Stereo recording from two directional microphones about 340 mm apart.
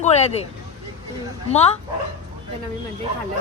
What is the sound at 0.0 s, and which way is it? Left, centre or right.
Speech, centre.